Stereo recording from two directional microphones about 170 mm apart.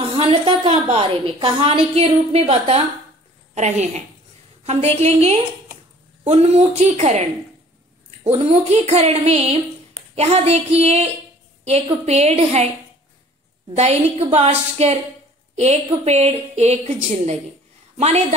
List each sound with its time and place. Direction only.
0.0 s a woman's voice: 30° right (ahead or behind)
13.7 s a woman's voice: 40° right (ahead or behind)